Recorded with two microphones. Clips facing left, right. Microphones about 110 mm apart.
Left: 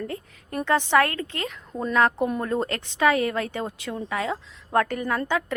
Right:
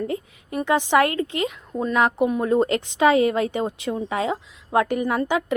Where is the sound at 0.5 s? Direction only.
15° right (ahead or behind).